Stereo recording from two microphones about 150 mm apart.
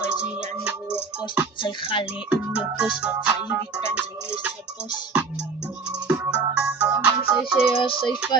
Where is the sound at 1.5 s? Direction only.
35° left (ahead or behind).